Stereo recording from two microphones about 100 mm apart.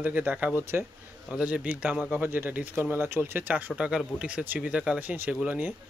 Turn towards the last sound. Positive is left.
turn(degrees=-15)  # may be behind; listen again after turning